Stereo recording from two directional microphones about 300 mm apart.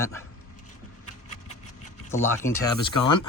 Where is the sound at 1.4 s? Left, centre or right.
Left.